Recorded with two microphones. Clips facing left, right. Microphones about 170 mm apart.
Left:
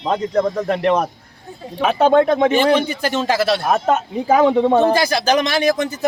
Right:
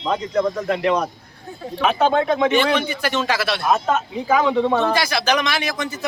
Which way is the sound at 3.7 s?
55° left (ahead or behind).